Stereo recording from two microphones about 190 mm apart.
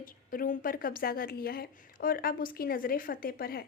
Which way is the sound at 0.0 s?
50° left (ahead or behind).